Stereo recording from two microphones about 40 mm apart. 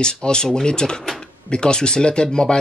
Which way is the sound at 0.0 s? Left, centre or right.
Left.